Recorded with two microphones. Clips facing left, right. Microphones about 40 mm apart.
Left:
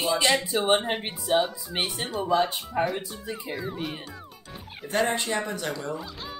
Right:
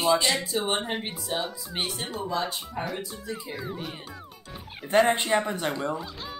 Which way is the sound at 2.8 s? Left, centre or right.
Left.